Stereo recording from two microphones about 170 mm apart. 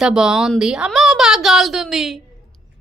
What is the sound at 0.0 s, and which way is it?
A woman's voice, 5° right (ahead or behind).